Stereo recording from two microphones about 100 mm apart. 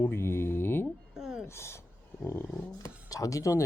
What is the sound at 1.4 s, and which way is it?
Dog, 25° left (ahead or behind).